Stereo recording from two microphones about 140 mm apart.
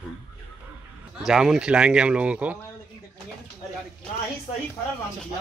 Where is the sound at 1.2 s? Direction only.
5° right (ahead or behind).